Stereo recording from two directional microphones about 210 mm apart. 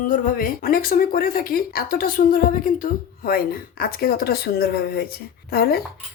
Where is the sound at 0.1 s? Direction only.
45° left (ahead or behind).